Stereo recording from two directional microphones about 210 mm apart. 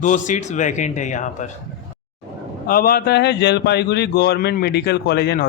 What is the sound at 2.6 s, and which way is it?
A man's voice, 45° left (ahead or behind).